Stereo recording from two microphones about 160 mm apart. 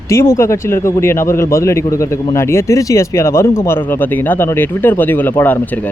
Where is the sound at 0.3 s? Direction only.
15° left (ahead or behind).